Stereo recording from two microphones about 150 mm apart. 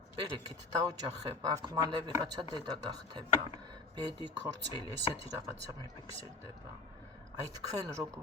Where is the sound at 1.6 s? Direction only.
25° right (ahead or behind).